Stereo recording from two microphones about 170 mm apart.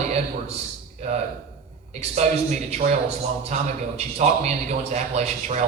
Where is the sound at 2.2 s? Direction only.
40° right (ahead or behind).